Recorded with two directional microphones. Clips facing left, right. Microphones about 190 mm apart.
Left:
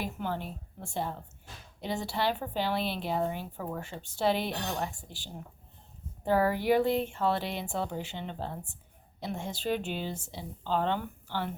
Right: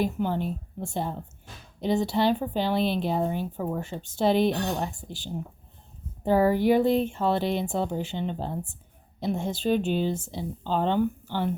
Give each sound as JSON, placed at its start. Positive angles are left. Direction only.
{"t": 0.0, "sound": "speech", "side_deg": -20}